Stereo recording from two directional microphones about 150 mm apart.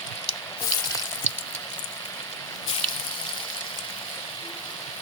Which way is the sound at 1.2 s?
50° left (ahead or behind).